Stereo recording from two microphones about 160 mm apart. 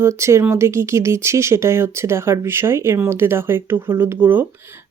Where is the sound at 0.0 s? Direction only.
15° right (ahead or behind).